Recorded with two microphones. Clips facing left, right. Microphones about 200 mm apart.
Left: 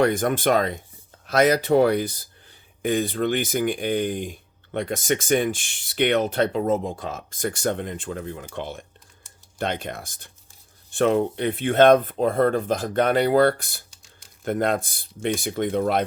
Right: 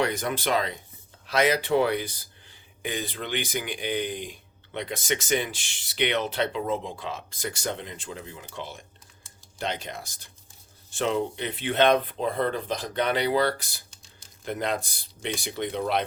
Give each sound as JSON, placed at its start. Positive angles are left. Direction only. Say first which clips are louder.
{"t": 0.0, "sound": "speech", "louder": "left 7 dB", "side_deg": 50}